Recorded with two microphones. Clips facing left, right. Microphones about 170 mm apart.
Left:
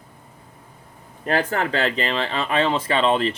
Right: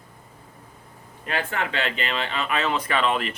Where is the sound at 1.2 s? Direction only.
40° left (ahead or behind).